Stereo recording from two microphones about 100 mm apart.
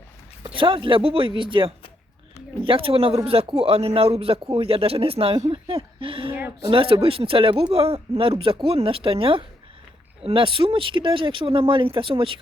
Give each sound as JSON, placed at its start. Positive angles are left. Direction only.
{"t": 0.4, "sound": "speech", "side_deg": -60}